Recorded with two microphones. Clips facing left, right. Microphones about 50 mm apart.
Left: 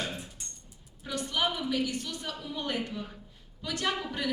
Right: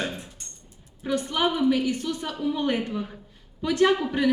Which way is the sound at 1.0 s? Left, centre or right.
Right.